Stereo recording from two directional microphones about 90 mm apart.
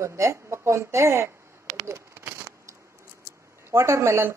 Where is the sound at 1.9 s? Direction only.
25° right (ahead or behind).